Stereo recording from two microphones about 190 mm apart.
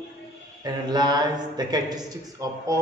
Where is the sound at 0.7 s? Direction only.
20° right (ahead or behind).